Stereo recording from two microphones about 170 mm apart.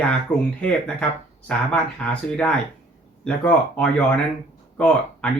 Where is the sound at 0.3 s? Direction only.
25° left (ahead or behind).